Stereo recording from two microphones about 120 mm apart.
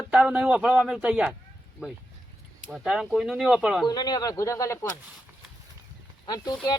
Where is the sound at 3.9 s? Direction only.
35° left (ahead or behind).